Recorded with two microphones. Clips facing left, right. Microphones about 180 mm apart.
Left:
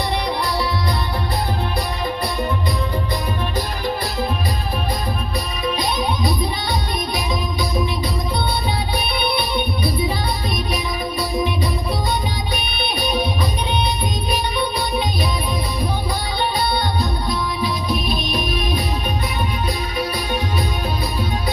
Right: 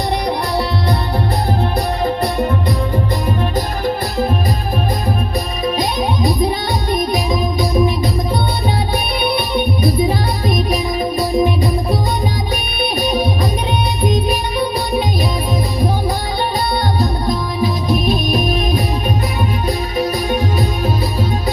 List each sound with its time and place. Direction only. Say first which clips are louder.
3.8 s music: right 5 dB; 45° right (ahead or behind)
5.6 s music: right 3 dB; 45° right (ahead or behind)
9.8 s music: right 6 dB; 45° right (ahead or behind)
14.3 s music: right 4 dB; 45° right (ahead or behind)
17.0 s music: right 5 dB; 45° right (ahead or behind)
20.0 s music: right 6 dB; 40° right (ahead or behind)